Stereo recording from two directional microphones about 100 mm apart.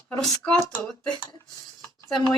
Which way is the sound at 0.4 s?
5° left (ahead or behind).